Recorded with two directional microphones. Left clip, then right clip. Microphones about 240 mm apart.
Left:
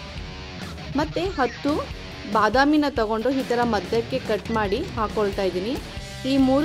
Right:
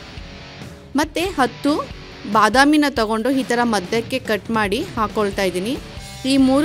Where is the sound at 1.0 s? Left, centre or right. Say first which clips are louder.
Right 5 dB; right.